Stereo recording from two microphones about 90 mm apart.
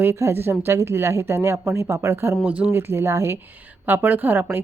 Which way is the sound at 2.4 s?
15° right (ahead or behind).